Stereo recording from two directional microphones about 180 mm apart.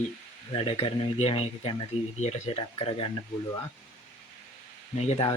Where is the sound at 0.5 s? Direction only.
30° left (ahead or behind).